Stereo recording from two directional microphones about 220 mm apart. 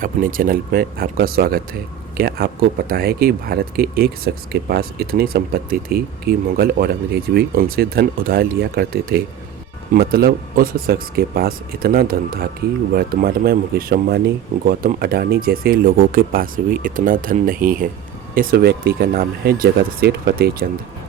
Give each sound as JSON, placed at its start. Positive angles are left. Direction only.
{"t": 0.0, "sound": "speech", "side_deg": -40}